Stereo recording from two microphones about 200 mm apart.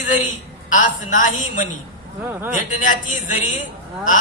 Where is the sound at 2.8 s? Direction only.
40° left (ahead or behind).